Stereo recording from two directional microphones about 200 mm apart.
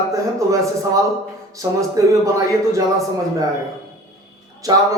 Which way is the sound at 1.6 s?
15° right (ahead or behind).